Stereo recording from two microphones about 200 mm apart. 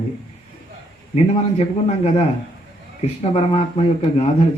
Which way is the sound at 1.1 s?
30° left (ahead or behind).